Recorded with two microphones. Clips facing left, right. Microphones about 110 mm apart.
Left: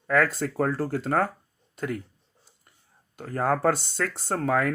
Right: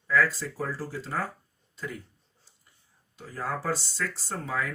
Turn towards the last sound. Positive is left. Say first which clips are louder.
# left 8 dB
turn(degrees=60)  # may be behind; listen again after turning